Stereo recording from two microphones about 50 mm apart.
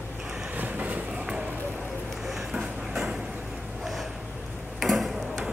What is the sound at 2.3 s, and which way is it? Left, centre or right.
Clip-clop, centre.